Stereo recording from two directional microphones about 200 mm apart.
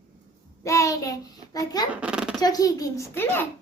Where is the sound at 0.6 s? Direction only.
15° left (ahead or behind).